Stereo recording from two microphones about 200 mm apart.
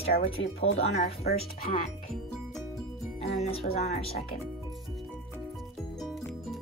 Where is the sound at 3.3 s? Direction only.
30° left (ahead or behind).